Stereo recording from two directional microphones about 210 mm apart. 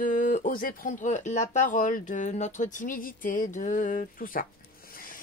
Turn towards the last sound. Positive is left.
turn(degrees=40)  # may be behind; listen again after turning